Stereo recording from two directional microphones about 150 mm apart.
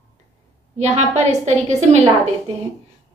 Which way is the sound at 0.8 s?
50° right (ahead or behind).